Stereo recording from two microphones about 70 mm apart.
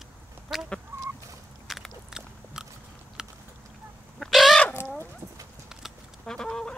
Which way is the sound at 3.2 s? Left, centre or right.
Centre.